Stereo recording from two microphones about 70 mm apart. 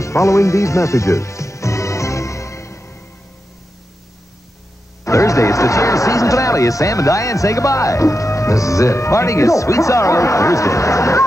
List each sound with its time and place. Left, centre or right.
0.0 s music: left
5.0 s speech: left